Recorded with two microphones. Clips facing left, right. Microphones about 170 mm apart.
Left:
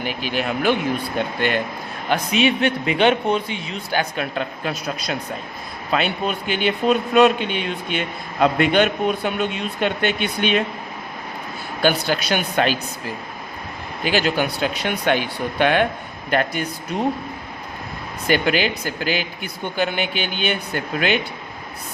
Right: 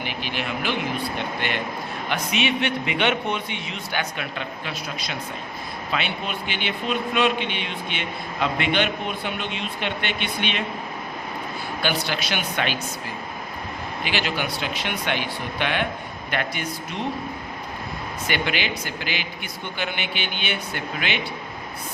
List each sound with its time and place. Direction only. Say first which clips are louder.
0.0 s speech: left 5 dB; 45° left (ahead or behind)
2.0 s speech: left 6 dB; 40° left (ahead or behind)
5.9 s speech: left 7 dB; 45° left (ahead or behind)
11.8 s speech: left 7 dB; 45° left (ahead or behind)
14.0 s speech: left 7 dB; 40° left (ahead or behind)
18.3 s speech: left 7 dB; 40° left (ahead or behind)